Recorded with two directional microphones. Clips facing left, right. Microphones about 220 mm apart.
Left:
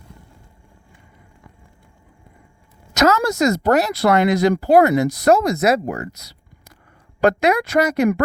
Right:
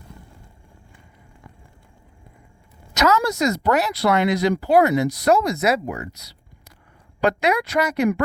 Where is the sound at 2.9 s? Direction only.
45° left (ahead or behind).